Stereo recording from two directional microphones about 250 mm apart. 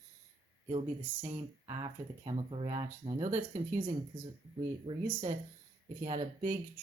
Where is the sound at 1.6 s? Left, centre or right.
Centre.